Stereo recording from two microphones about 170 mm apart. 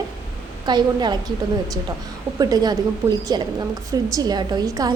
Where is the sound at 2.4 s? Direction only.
20° right (ahead or behind).